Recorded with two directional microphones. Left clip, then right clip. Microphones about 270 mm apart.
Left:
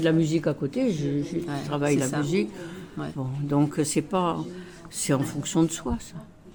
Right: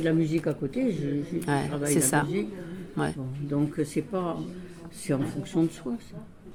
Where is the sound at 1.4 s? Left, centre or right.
Right.